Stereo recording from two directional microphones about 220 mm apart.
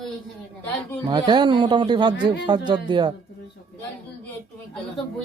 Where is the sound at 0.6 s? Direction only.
10° left (ahead or behind).